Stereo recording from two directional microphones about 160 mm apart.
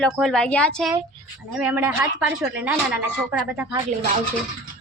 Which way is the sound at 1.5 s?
10° right (ahead or behind).